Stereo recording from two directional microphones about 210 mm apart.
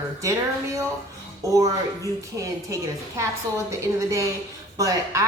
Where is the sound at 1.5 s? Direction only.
15° right (ahead or behind).